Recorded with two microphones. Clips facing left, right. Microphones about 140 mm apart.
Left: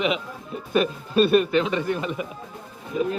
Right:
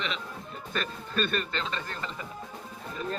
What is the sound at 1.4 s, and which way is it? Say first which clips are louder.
Speech: left 12 dB; 15° left (ahead or behind).